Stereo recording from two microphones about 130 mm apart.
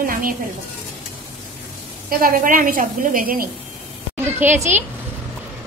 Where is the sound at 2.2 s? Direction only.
90° right.